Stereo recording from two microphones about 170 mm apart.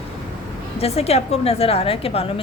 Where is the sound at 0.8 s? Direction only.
35° left (ahead or behind).